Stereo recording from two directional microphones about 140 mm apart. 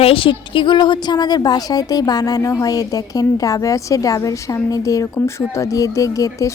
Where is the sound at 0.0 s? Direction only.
40° left (ahead or behind).